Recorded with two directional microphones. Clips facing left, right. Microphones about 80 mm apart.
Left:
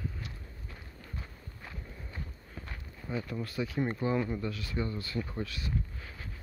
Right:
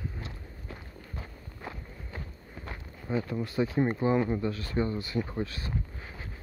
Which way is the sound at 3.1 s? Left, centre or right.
Right.